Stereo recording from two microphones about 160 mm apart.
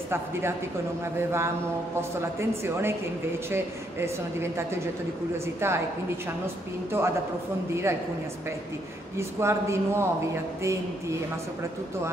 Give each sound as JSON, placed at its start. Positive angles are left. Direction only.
{"t": 0.1, "sound": "speech", "side_deg": -15}
{"t": 9.1, "sound": "speech", "side_deg": -15}